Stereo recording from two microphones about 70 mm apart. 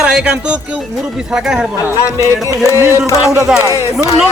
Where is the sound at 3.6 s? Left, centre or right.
Right.